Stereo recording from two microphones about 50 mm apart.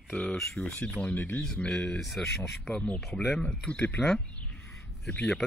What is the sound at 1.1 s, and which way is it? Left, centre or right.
Speech, left.